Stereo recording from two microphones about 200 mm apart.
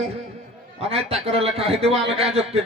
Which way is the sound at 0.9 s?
30° right (ahead or behind).